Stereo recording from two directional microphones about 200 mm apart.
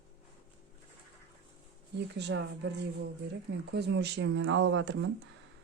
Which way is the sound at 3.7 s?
55° right (ahead or behind).